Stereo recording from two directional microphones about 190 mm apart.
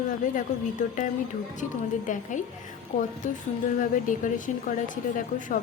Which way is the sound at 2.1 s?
40° left (ahead or behind).